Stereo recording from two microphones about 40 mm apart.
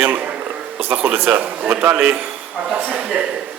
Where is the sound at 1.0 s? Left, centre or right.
Right.